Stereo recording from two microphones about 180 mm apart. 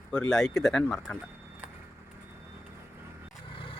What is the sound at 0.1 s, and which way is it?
Speech, 5° left (ahead or behind).